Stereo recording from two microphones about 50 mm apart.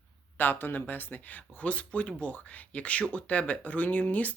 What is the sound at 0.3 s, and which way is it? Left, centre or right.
Speech, left.